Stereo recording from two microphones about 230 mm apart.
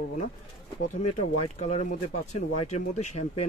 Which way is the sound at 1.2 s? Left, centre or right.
Left.